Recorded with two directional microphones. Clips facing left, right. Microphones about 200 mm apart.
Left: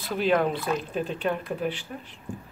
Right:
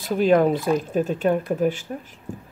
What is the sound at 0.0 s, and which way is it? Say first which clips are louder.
Speech: right 6 dB; 45° right (ahead or behind).